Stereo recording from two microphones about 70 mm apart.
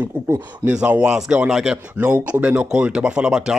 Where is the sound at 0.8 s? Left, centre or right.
Centre.